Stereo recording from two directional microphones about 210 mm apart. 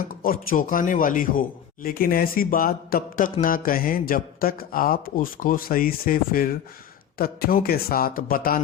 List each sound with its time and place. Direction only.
0.0 s speech: 40° left (ahead or behind)